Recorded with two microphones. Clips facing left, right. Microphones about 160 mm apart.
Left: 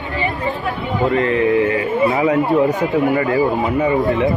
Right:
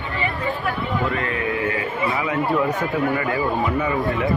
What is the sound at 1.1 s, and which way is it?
Speech, 30° left (ahead or behind).